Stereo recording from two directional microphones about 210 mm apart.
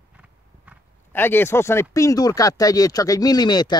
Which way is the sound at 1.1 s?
10° left (ahead or behind).